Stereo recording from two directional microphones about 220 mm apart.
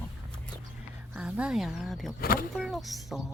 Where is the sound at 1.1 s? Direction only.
5° right (ahead or behind).